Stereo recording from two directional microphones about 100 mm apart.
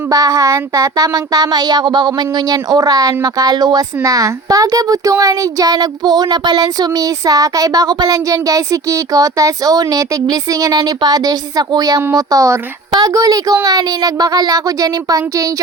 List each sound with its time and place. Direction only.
0.1 s speech: 35° right (ahead or behind)